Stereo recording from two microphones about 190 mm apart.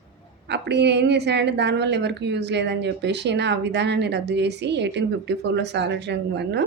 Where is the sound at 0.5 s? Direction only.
60° right (ahead or behind).